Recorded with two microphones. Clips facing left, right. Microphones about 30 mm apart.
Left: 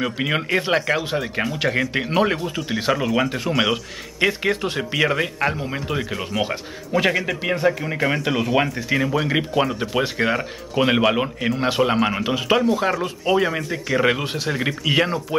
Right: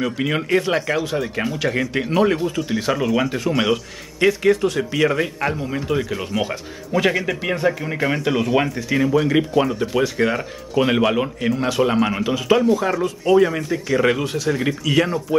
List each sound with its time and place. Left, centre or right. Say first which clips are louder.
0.0 s speech: right 1 dB; centre
4.3 s speech: right 5 dB; left